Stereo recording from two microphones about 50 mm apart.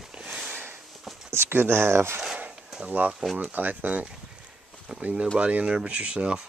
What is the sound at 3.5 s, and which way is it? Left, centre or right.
Speech, right.